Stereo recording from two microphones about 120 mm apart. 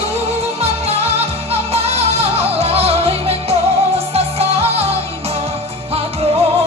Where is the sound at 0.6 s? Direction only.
60° right (ahead or behind).